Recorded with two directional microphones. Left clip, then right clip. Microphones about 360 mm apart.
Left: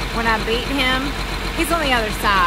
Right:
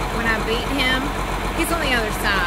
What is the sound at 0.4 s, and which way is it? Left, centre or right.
Speech, centre.